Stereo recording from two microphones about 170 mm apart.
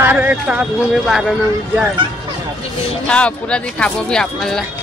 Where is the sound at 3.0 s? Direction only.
5° left (ahead or behind).